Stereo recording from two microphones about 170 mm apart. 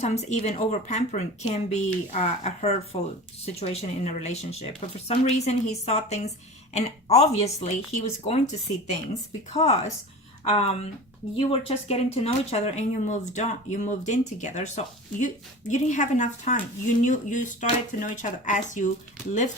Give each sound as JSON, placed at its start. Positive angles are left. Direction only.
{"t": 0.0, "sound": "speech", "side_deg": 40}